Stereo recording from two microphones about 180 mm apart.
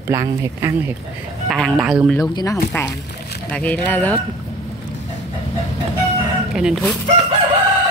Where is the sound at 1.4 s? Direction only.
Centre (ahead or behind).